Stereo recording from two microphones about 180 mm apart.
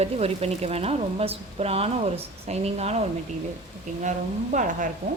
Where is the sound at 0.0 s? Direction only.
35° right (ahead or behind).